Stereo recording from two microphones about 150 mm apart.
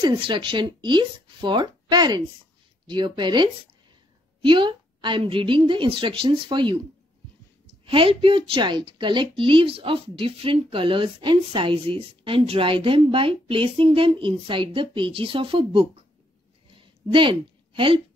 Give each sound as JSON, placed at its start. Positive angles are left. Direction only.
{"t": 0.0, "sound": "a woman's voice", "side_deg": -35}
{"t": 4.5, "sound": "a woman's voice", "side_deg": -35}
{"t": 7.8, "sound": "a woman's voice", "side_deg": -35}
{"t": 16.7, "sound": "a sound", "side_deg": -35}